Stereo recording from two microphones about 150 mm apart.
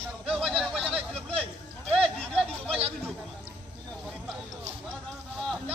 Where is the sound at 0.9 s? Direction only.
40° right (ahead or behind).